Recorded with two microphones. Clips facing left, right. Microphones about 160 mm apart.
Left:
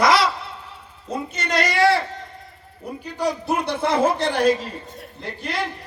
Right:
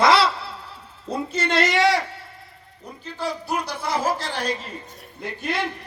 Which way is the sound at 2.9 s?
15° left (ahead or behind).